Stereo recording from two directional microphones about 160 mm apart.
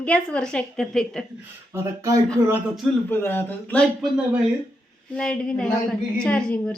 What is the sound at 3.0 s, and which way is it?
A woman's voice, 15° left (ahead or behind).